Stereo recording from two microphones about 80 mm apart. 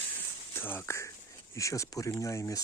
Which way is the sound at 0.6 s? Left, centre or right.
Left.